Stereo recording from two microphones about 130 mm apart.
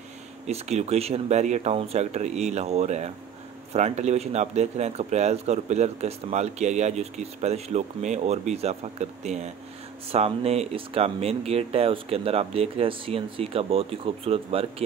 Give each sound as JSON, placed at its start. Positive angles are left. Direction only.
{"t": 0.5, "sound": "speech", "side_deg": -55}